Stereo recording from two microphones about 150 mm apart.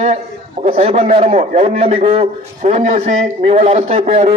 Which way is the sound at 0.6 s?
40° right (ahead or behind).